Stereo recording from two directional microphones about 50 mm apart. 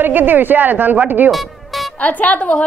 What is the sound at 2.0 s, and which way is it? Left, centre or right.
Speech, left.